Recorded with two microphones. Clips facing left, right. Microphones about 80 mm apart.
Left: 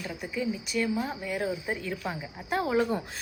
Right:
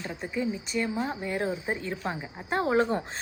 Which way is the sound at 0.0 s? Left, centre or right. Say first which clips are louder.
Right 1 dB; right.